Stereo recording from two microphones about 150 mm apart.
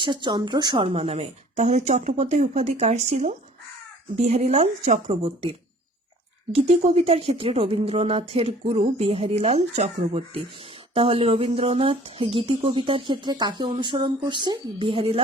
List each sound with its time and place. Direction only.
0.0 s speech: 30° right (ahead or behind)